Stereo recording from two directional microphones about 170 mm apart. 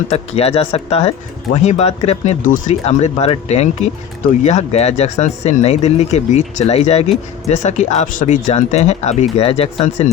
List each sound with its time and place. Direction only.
0.1 s speech: 35° left (ahead or behind)